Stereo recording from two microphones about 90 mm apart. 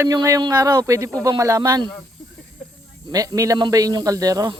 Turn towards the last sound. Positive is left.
turn(degrees=-40)  # may be behind; listen again after turning